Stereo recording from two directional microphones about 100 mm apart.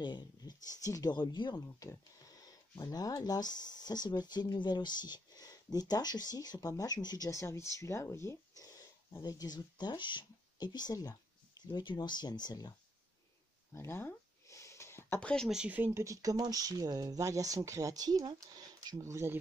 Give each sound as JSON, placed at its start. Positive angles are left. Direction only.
{"t": 0.0, "sound": "speech", "side_deg": 45}
{"t": 13.7, "sound": "a sound", "side_deg": 25}
{"t": 15.1, "sound": "speech", "side_deg": 10}
{"t": 15.4, "sound": "speech", "side_deg": -10}
{"t": 15.9, "sound": "speech", "side_deg": -30}